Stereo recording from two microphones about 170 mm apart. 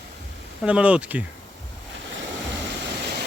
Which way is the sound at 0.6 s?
5° right (ahead or behind).